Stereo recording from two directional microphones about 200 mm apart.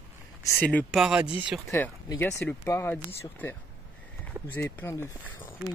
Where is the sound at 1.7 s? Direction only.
10° left (ahead or behind).